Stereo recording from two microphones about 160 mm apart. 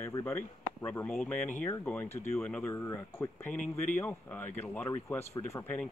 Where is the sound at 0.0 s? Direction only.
15° left (ahead or behind).